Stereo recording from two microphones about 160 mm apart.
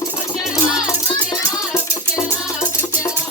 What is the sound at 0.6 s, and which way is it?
Music, 5° right (ahead or behind).